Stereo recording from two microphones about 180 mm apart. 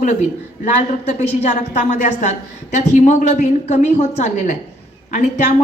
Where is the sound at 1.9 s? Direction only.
40° left (ahead or behind).